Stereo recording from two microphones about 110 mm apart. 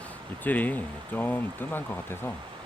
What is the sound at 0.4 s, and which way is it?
Speech, 15° left (ahead or behind).